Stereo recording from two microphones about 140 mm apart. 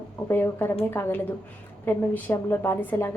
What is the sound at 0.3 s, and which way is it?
A woman's voice, 15° left (ahead or behind).